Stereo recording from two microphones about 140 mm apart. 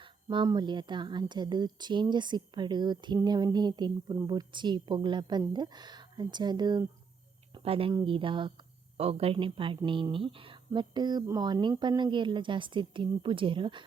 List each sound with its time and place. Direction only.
0.0 s speech: 35° right (ahead or behind)
7.5 s speech: 40° right (ahead or behind)